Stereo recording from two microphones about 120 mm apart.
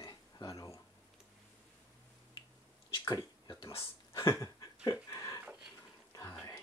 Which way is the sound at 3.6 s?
50° left (ahead or behind).